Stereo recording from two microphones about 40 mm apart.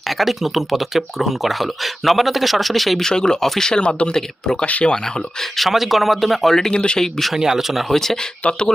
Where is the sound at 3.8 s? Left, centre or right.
Left.